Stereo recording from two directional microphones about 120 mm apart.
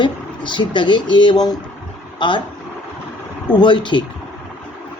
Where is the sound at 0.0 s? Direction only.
40° left (ahead or behind).